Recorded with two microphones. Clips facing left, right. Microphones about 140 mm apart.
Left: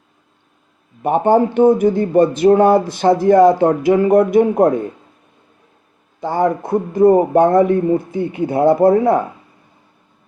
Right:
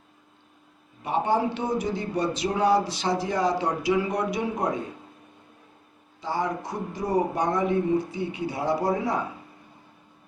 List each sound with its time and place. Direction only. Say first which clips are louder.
1.0 s speech: left 11 dB; 50° left (ahead or behind)
6.1 s speech: left 11 dB; 55° left (ahead or behind)